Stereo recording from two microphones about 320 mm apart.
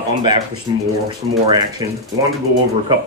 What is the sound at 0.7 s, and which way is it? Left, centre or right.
Speech, centre.